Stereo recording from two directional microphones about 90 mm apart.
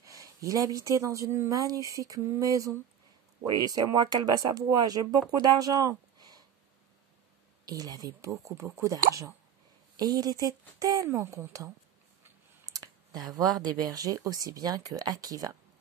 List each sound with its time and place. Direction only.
0.0 s speech: 40° right (ahead or behind)
7.6 s speech: 45° right (ahead or behind)